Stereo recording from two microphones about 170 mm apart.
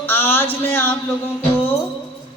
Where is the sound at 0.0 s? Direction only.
10° left (ahead or behind).